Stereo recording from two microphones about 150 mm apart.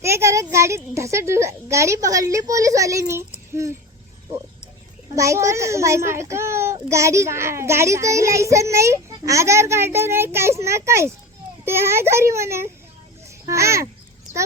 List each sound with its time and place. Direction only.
0.0 s a sound: 20° right (ahead or behind)
0.9 s a child's voice: 20° right (ahead or behind)
5.1 s a child's voice: 20° right (ahead or behind)
13.2 s babbling: 20° right (ahead or behind)